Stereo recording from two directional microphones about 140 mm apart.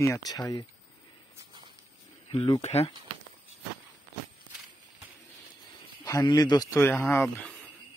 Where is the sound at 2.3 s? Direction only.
35° left (ahead or behind).